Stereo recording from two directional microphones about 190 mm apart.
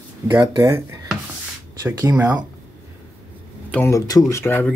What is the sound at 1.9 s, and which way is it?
Speech, 15° right (ahead or behind).